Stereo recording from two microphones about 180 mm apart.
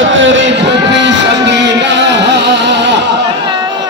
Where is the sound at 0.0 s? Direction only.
90° right.